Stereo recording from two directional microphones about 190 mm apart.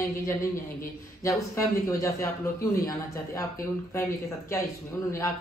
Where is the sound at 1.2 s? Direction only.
15° left (ahead or behind).